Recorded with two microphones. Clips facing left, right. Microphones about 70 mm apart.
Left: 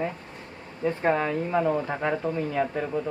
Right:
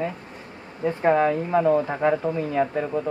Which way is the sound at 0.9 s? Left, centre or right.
Centre.